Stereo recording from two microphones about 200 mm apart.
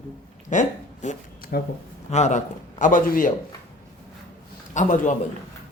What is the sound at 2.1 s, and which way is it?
A man's voice, 35° left (ahead or behind).